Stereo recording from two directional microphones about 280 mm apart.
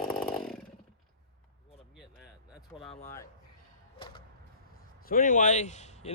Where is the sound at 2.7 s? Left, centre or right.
Left.